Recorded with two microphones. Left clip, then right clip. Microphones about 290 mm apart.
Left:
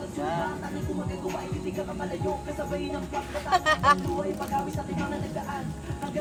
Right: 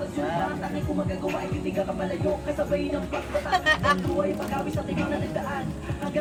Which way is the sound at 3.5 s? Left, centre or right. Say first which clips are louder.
Left 1 dB; centre.